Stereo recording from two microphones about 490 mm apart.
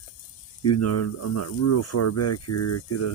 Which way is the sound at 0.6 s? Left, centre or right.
Left.